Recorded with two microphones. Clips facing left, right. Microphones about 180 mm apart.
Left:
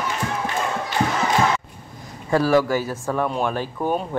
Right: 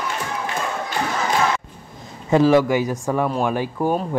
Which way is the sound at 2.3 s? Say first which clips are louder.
Right 3 dB; 20° right (ahead or behind).